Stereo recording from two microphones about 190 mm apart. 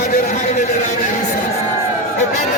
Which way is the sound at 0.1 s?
40° left (ahead or behind).